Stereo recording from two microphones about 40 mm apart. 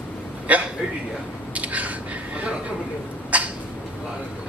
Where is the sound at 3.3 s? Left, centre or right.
Right.